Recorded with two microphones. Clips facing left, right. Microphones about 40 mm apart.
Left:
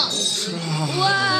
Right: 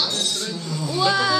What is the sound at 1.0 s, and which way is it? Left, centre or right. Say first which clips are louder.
Speech: even; centre.